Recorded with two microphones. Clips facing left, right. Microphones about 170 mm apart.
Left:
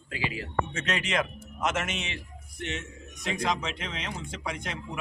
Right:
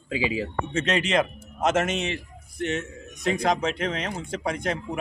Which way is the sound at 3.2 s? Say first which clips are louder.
Right 6 dB; 50° right (ahead or behind).